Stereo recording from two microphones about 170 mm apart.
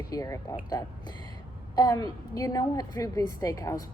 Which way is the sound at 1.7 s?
20° left (ahead or behind).